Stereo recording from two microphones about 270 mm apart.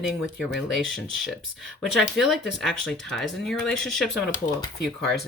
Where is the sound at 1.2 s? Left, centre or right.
Centre.